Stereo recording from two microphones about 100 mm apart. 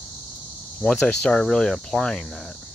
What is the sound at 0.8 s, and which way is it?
Speech, 10° left (ahead or behind).